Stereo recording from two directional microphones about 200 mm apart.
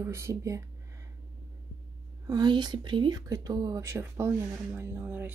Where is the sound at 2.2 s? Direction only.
20° right (ahead or behind).